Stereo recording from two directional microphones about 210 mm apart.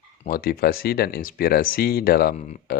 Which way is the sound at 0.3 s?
45° left (ahead or behind).